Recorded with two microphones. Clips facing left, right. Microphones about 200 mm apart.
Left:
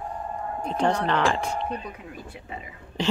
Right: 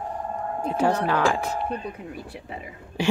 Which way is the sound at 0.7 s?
5° right (ahead or behind).